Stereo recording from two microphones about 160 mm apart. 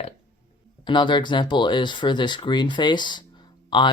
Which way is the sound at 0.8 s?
30° left (ahead or behind).